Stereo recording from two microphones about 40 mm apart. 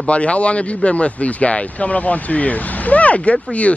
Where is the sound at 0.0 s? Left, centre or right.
Left.